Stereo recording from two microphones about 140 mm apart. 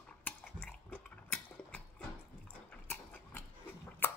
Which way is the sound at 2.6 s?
15° left (ahead or behind).